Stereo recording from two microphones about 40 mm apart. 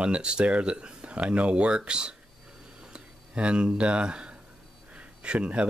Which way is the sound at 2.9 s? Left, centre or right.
Right.